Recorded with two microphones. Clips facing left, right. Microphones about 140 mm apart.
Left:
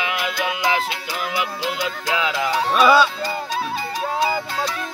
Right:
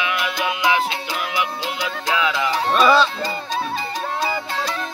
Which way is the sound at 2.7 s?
5° left (ahead or behind).